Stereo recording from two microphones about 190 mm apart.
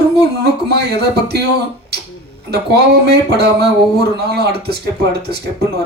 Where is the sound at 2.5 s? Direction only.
60° right (ahead or behind).